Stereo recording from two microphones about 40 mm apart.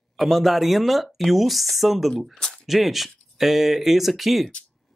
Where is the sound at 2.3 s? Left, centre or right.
Centre.